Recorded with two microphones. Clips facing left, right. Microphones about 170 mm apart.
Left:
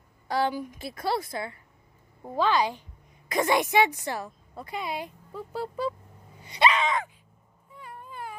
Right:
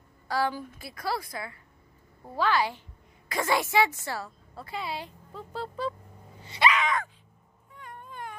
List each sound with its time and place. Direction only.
0.3 s a woman's voice: 20° left (ahead or behind)
6.4 s dog: 15° left (ahead or behind)
6.7 s a sound: 25° left (ahead or behind)
7.7 s cat: 5° left (ahead or behind)